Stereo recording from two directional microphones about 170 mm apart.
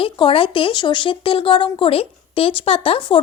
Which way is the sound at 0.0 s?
30° left (ahead or behind).